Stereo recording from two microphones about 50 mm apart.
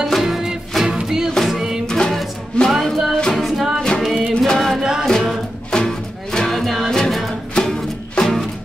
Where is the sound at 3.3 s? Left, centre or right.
Centre.